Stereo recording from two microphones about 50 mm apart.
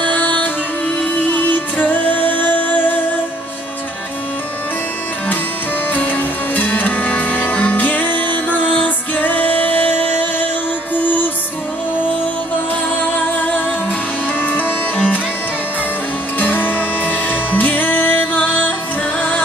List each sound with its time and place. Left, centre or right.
0.0 s music: left
5.9 s music: left
13.4 s music: left
16.3 s music: left